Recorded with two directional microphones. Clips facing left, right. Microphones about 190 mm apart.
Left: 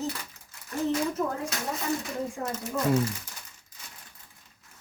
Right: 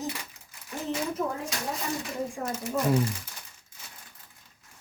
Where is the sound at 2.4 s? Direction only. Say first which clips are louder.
Right 2 dB; 10° right (ahead or behind).